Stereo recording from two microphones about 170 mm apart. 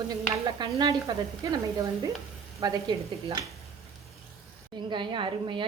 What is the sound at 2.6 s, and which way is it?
Speech, 25° right (ahead or behind).